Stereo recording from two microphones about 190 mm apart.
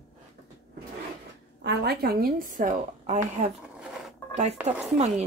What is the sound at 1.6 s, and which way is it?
A woman's voice, 55° right (ahead or behind).